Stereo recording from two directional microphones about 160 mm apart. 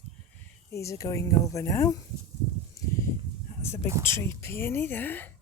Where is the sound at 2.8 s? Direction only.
20° left (ahead or behind).